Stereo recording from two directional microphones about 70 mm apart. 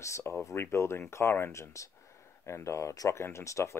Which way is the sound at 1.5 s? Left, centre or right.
Left.